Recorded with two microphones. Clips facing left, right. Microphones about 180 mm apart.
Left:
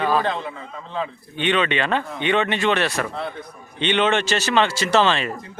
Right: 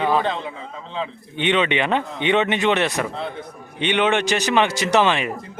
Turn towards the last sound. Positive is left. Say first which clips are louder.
# even
turn(degrees=-15)  # may be behind; listen again after turning